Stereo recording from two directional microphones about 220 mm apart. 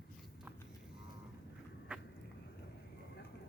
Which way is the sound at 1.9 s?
5° right (ahead or behind).